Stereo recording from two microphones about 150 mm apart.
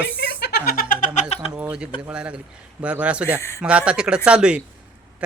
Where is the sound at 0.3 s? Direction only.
90° left; by 1.2 s 60° left (ahead or behind).